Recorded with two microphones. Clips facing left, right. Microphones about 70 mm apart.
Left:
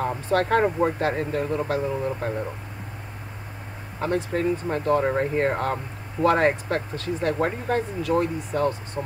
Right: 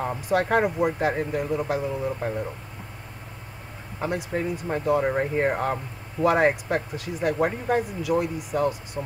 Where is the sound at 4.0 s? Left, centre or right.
Centre.